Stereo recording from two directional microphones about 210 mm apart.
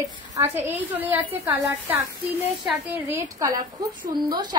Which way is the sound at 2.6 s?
10° right (ahead or behind).